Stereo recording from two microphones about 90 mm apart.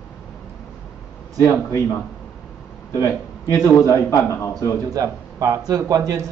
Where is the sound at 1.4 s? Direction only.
35° left (ahead or behind).